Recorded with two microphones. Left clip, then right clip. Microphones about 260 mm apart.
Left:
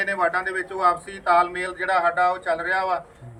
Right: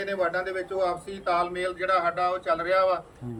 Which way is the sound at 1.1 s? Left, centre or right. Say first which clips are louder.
Left 7 dB; centre.